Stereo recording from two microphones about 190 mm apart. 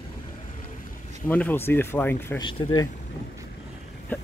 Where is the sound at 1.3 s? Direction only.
10° left (ahead or behind).